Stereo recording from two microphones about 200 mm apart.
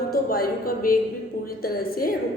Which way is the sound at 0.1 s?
50° left (ahead or behind).